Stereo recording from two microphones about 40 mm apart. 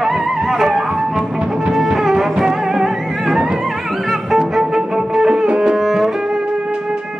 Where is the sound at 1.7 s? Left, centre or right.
Centre.